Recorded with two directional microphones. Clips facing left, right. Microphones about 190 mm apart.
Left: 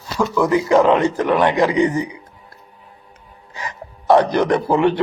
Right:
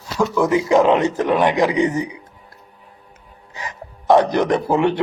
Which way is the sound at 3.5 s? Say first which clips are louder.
Left 1 dB; 20° right (ahead or behind).